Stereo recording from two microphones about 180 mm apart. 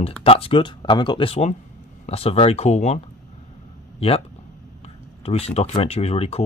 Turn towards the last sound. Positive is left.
turn(degrees=35)  # may be behind; listen again after turning